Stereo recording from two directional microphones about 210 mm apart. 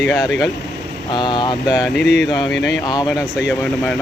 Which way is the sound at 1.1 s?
20° left (ahead or behind).